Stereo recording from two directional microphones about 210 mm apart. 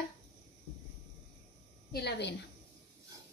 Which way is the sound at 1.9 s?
50° left (ahead or behind).